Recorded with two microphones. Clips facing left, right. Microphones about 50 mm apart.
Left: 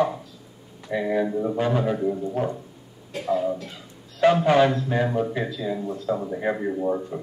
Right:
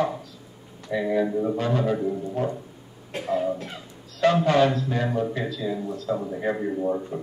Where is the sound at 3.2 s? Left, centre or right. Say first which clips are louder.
Left 1 dB; centre.